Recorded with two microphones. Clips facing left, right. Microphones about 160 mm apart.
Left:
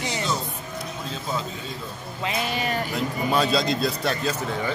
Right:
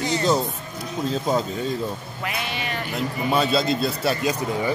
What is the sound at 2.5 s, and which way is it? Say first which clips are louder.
Speech: left 3 dB; 40° left (ahead or behind).